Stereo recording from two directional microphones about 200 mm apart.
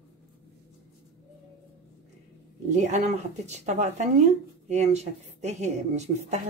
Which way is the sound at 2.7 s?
35° right (ahead or behind).